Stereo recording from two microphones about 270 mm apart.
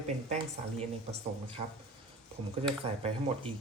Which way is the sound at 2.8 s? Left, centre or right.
Right.